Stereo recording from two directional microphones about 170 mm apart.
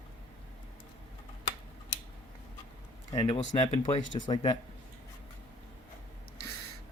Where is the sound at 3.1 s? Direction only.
30° left (ahead or behind).